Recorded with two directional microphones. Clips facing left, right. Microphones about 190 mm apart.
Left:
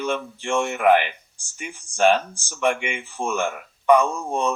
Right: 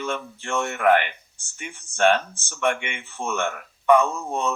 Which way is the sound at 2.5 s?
15° left (ahead or behind).